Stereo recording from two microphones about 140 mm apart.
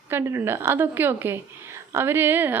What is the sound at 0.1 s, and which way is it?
A woman's voice, 15° right (ahead or behind).